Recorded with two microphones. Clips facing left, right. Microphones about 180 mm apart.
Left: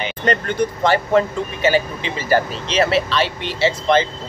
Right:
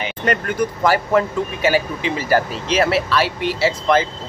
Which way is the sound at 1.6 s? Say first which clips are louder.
Left 1 dB; 10° right (ahead or behind).